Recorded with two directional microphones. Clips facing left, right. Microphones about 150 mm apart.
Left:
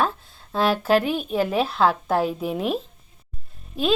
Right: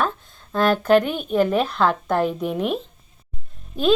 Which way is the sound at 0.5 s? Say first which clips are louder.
Right 3 dB; 5° left (ahead or behind).